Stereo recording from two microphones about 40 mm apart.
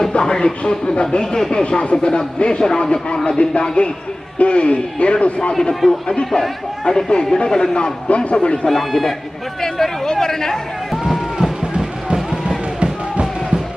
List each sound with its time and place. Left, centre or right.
0.0 s a man's voice: left
1.8 s a man's voice: left
8.6 s a man's voice: centre
12.8 s music: right